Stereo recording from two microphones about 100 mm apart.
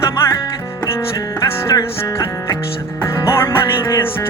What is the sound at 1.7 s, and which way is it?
Music, 35° left (ahead or behind).